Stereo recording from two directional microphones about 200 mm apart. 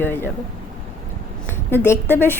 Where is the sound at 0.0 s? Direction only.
10° left (ahead or behind).